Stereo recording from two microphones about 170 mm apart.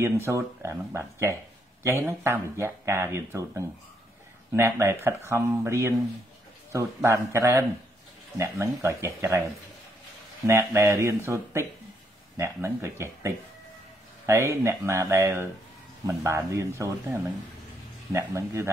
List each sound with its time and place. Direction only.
0.0 s speech: 15° right (ahead or behind)
10.4 s speech: 15° right (ahead or behind)